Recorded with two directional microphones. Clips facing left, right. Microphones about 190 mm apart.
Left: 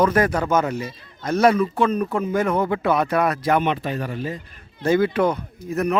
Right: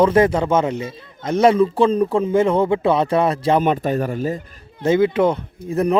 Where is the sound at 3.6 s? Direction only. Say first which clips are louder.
Right 5 dB; 45° right (ahead or behind).